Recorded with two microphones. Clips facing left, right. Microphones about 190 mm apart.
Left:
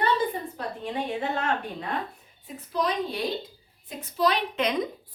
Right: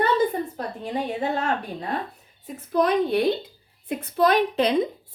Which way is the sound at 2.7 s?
55° right (ahead or behind).